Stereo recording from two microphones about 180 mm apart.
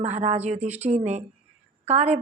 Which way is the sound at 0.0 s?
40° right (ahead or behind).